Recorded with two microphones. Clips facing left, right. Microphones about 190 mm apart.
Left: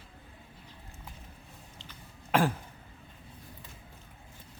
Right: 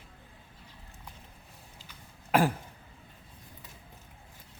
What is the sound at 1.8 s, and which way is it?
Throat clearing, 10° right (ahead or behind).